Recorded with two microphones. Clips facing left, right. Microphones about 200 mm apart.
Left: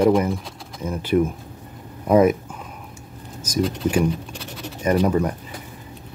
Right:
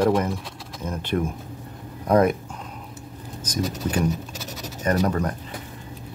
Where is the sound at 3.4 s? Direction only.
10° left (ahead or behind).